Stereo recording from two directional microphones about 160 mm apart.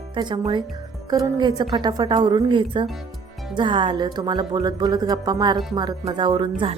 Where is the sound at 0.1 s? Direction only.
30° right (ahead or behind).